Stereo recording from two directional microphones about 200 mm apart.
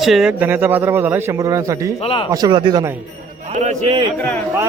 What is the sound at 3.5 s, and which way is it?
Speech, 35° right (ahead or behind).